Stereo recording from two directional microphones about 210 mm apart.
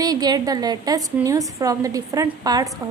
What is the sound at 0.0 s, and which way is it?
A woman's voice, 20° right (ahead or behind).